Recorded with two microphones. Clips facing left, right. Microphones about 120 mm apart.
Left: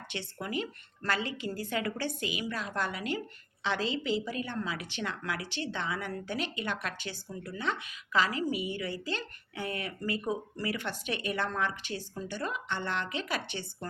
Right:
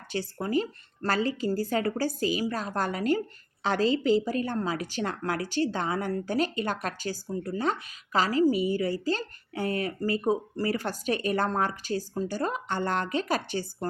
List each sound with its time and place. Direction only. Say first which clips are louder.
0.1 s a woman's voice: right 9 dB; 35° right (ahead or behind)